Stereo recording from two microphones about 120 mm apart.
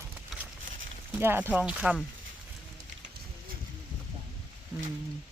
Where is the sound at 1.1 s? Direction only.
15° right (ahead or behind).